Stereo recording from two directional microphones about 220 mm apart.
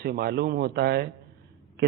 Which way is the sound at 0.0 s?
45° right (ahead or behind).